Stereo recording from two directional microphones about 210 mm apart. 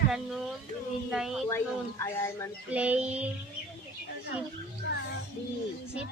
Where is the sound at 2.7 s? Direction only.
5° right (ahead or behind).